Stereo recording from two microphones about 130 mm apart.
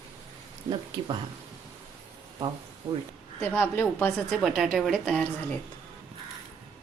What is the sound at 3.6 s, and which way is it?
Speech, 15° left (ahead or behind).